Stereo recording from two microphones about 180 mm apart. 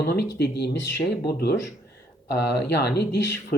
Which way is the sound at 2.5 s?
65° left (ahead or behind).